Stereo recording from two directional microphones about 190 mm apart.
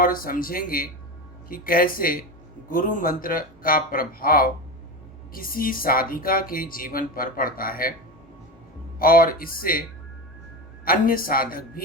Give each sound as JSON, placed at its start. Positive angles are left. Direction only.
{"t": 0.0, "sound": "speech", "side_deg": 50}
{"t": 9.0, "sound": "speech", "side_deg": 50}
{"t": 10.8, "sound": "speech", "side_deg": 50}